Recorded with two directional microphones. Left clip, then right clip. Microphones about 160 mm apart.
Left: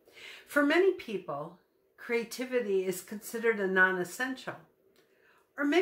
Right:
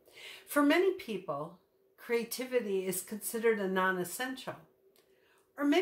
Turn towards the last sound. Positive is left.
turn(degrees=0)  # may be behind; listen again after turning